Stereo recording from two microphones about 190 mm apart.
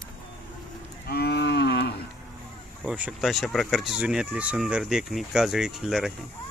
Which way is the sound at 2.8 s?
5° right (ahead or behind).